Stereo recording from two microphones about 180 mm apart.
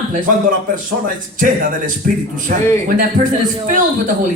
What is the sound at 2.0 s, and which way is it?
Speech, 50° right (ahead or behind).